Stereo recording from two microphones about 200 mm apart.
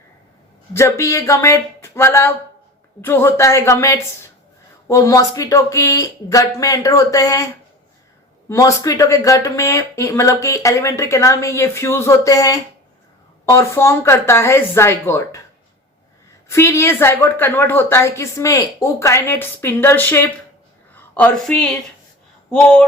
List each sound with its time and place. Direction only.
0.7 s speech: 15° left (ahead or behind)
8.4 s speech: 15° left (ahead or behind)
16.5 s a woman's voice: 15° left (ahead or behind)